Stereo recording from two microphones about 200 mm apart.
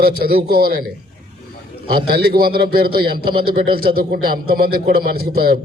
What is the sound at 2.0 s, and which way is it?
A man's voice, 50° right (ahead or behind).